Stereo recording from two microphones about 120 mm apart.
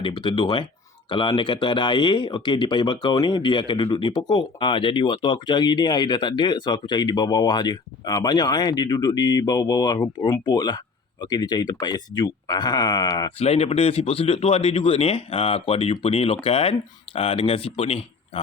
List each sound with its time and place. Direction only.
0.0 s speech: 45° left (ahead or behind)
13.4 s speech: 60° left (ahead or behind)